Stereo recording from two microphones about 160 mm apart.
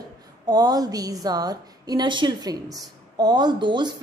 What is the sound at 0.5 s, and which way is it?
A woman's voice, 25° right (ahead or behind).